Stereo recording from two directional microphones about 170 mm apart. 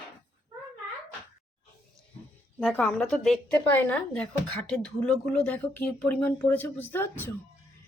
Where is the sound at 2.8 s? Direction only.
5° left (ahead or behind).